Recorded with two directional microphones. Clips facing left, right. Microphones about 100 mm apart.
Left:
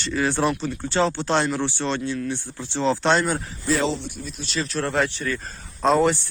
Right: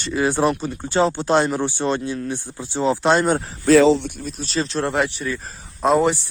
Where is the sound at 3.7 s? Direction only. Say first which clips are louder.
Right 10 dB; 80° right.